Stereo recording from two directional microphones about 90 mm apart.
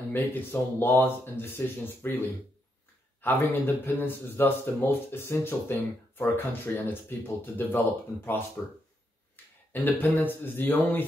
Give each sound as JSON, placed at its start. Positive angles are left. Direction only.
{"t": 0.1, "sound": "speech", "side_deg": 25}
{"t": 9.7, "sound": "speech", "side_deg": 20}